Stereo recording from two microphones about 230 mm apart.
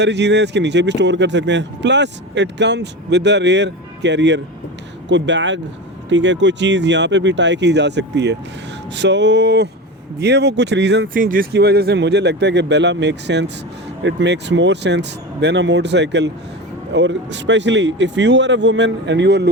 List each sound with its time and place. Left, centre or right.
0.0 s speech: right